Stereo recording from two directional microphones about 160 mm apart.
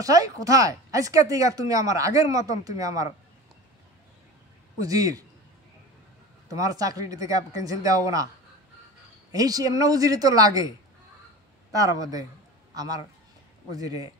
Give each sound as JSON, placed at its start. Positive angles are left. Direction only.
{"t": 0.0, "sound": "speech", "side_deg": -20}
{"t": 4.7, "sound": "speech", "side_deg": -20}
{"t": 6.5, "sound": "speech", "side_deg": -20}
{"t": 9.3, "sound": "speech", "side_deg": -25}
{"t": 11.7, "sound": "speech", "side_deg": -20}